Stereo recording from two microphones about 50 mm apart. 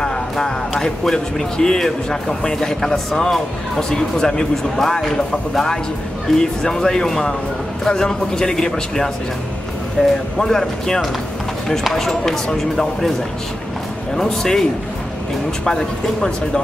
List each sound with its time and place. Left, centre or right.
0.0 s speech: centre
10.0 s speech: left
10.4 s speech: centre
14.1 s speech: centre